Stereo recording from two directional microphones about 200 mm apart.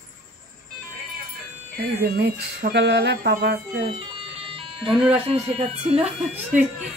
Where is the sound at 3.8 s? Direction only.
25° right (ahead or behind).